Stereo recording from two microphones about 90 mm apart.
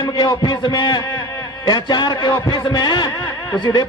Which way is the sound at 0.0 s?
55° left (ahead or behind).